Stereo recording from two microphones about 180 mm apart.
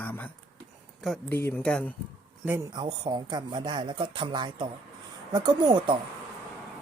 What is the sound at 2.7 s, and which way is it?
Speech, 25° right (ahead or behind).